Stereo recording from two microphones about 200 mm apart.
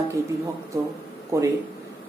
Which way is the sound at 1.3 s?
15° right (ahead or behind).